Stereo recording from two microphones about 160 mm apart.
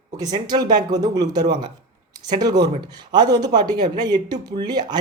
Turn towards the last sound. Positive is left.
turn(degrees=-25)  # may be behind; listen again after turning